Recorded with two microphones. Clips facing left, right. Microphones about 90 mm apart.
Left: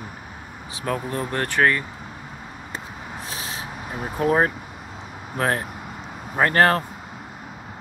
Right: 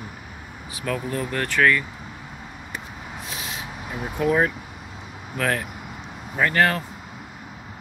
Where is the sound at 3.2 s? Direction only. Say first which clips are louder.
Left 1 dB; 35° left (ahead or behind).